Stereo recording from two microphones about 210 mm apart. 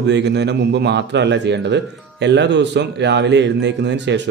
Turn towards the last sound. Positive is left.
turn(degrees=-55)  # may be behind; listen again after turning